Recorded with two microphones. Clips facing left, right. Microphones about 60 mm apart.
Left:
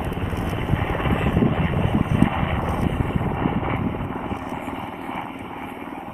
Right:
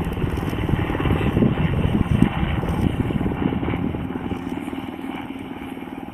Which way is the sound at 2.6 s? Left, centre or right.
Left.